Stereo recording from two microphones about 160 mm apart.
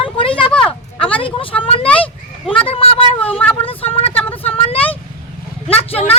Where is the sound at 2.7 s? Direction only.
35° left (ahead or behind).